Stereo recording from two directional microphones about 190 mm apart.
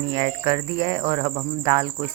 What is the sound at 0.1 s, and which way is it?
Speech, 20° right (ahead or behind).